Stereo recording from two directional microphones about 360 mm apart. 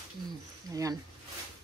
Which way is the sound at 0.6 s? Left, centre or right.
Centre.